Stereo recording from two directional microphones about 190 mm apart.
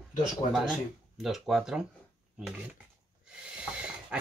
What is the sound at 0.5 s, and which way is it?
Speech, centre (ahead or behind).